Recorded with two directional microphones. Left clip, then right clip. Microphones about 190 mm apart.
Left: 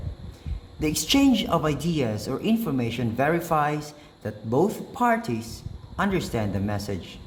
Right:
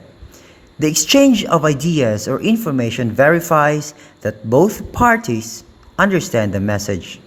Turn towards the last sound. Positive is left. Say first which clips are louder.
# right 10 dB
turn(degrees=-40)  # may be behind; listen again after turning